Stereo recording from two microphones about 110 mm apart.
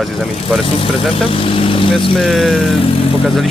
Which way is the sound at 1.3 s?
55° left (ahead or behind).